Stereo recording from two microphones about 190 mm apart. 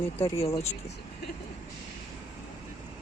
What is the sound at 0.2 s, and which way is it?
Speech, 30° left (ahead or behind).